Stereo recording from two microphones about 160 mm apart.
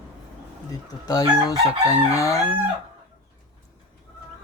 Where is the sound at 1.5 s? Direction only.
20° left (ahead or behind).